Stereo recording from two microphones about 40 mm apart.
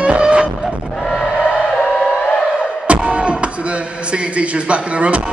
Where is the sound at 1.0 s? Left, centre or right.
Centre.